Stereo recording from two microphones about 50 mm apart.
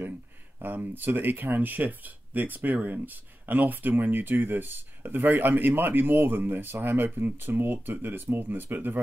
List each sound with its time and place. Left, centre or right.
0.6 s speech: right